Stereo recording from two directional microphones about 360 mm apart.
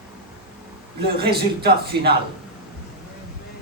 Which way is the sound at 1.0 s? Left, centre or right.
Right.